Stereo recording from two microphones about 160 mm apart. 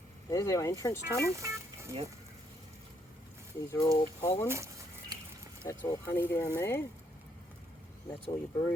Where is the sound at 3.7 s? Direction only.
20° left (ahead or behind).